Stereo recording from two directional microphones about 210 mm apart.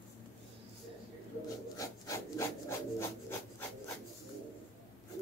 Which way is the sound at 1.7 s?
15° left (ahead or behind).